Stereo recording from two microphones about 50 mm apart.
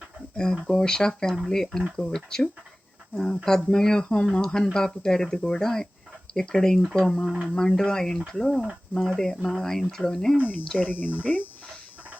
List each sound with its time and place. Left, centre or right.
0.7 s speech: centre
10.8 s speech: left